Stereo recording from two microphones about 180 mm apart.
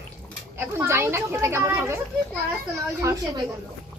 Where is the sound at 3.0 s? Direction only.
20° right (ahead or behind).